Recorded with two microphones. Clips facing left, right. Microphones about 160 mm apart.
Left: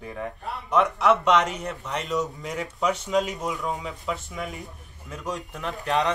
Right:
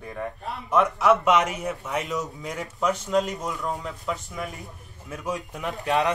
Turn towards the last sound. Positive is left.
turn(degrees=0)  # may be behind; listen again after turning